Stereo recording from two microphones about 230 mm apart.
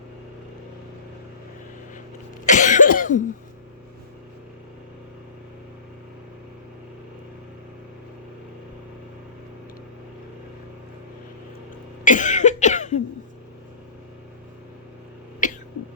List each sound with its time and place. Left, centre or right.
2.5 s cough: left
12.0 s cough: left
15.4 s throat clearing: left